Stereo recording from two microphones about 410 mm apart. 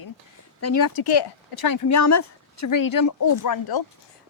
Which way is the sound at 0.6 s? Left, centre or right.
Left.